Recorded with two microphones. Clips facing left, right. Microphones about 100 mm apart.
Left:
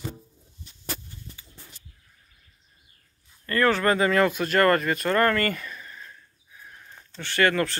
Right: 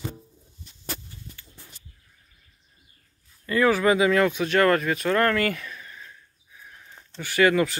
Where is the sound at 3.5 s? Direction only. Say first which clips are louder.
Right 2 dB; 5° right (ahead or behind).